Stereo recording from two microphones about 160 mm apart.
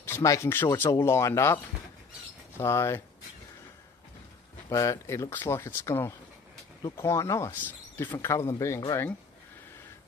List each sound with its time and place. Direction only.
0.0 s speech: 15° left (ahead or behind)
4.6 s speech: 20° left (ahead or behind)